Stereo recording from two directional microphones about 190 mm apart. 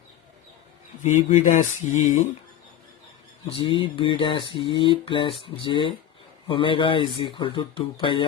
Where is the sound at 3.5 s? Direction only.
25° left (ahead or behind).